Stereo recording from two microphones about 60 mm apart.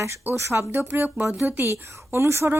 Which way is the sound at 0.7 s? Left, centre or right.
Right.